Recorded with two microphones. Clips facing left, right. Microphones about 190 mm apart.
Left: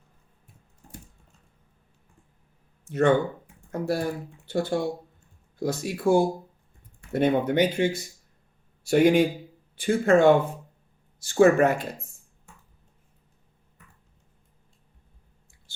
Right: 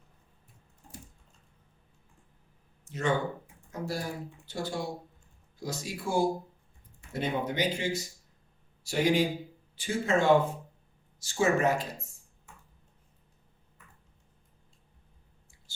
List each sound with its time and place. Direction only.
2.9 s speech: 60° left (ahead or behind)